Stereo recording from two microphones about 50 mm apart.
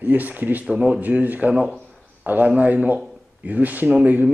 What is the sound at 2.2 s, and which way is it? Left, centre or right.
A man's voice, right.